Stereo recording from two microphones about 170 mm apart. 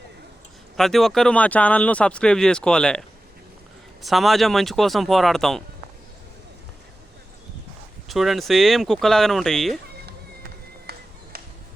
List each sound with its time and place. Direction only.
0.8 s speech: centre (ahead or behind)
4.0 s speech: centre (ahead or behind)
8.0 s speech: centre (ahead or behind)
10.9 s music: 65° right (ahead or behind)